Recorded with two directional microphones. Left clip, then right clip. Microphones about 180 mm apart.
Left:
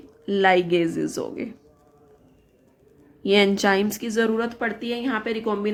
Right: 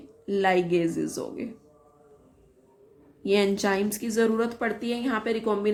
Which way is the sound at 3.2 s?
25° left (ahead or behind).